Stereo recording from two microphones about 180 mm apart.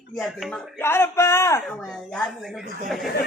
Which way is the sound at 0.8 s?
15° left (ahead or behind).